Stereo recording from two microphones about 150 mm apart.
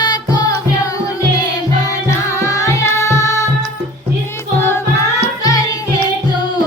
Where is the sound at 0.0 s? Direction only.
25° left (ahead or behind).